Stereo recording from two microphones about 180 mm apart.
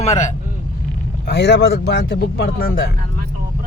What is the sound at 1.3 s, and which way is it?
Speech, 70° left (ahead or behind).